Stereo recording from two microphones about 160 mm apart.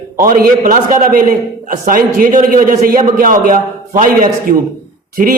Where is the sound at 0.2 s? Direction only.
65° right (ahead or behind).